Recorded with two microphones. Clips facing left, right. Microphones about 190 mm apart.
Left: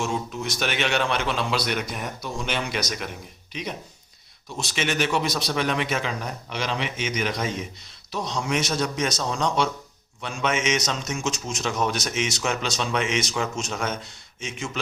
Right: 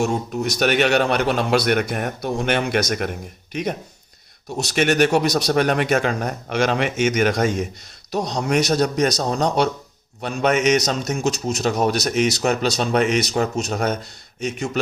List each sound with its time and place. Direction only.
0.0 s speech: 45° right (ahead or behind)